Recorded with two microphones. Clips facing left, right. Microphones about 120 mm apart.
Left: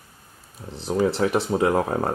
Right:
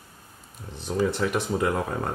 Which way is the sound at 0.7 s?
30° left (ahead or behind).